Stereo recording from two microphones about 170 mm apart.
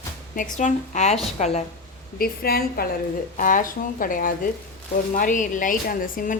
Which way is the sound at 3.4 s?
50° left (ahead or behind).